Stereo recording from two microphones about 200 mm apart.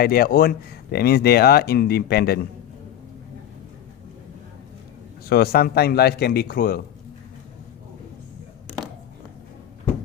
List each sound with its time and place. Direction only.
0.0 s speech: 50° left (ahead or behind)
5.3 s speech: 50° left (ahead or behind)